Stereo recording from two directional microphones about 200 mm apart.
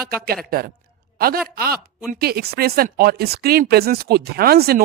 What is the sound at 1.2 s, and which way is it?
Speech, 50° right (ahead or behind).